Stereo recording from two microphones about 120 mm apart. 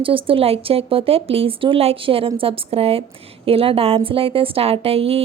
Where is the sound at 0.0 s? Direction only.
50° right (ahead or behind).